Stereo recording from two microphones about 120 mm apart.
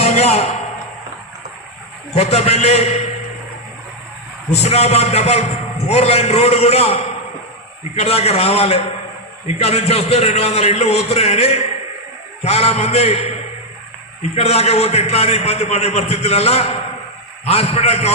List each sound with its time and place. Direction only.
0.0 s a sound: 65° left (ahead or behind)
2.1 s a man's voice: 65° left (ahead or behind)
4.6 s a man's voice: 65° left (ahead or behind)
14.3 s a man's voice: 60° left (ahead or behind)